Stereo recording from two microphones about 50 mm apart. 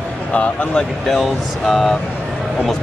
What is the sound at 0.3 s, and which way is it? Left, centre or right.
Speech, left.